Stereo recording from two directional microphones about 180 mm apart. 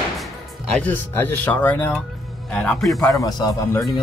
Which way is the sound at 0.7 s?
10° left (ahead or behind).